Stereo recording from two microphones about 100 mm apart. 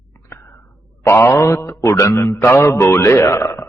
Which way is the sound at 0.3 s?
25° left (ahead or behind).